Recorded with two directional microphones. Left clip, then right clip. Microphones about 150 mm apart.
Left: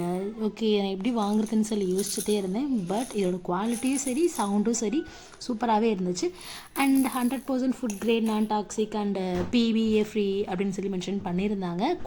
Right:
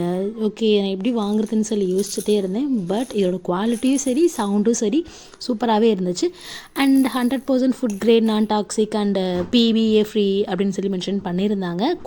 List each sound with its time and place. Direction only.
0.0 s speech: 25° right (ahead or behind)
7.2 s speech: 40° right (ahead or behind)
8.0 s speech: 45° right (ahead or behind)